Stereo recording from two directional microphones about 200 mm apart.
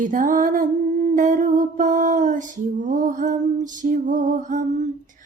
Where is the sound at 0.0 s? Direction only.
40° right (ahead or behind).